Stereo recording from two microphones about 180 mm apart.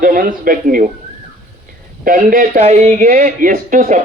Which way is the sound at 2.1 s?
50° right (ahead or behind).